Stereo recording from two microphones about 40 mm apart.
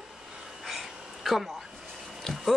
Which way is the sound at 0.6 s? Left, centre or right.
Centre.